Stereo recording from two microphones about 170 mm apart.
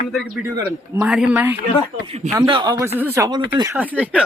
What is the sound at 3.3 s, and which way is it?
Speech, 25° right (ahead or behind).